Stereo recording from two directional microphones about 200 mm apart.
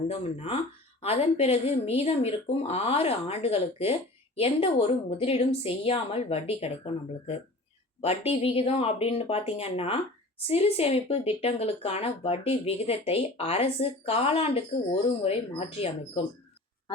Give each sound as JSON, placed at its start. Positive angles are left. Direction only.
{"t": 0.1, "sound": "speech", "side_deg": 30}